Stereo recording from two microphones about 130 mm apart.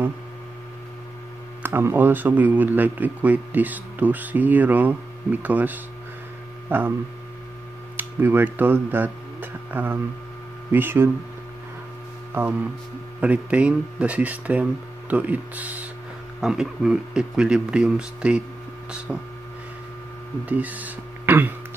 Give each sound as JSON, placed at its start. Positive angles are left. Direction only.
{"t": 1.6, "sound": "speech", "side_deg": -20}
{"t": 8.0, "sound": "speech", "side_deg": -15}
{"t": 12.4, "sound": "speech", "side_deg": -20}
{"t": 20.4, "sound": "speech", "side_deg": -10}